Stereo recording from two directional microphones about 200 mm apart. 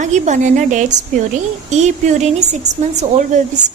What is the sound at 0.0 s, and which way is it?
A woman's voice, 35° right (ahead or behind).